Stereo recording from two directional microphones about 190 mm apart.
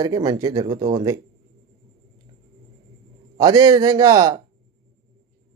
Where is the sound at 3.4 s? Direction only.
20° right (ahead or behind).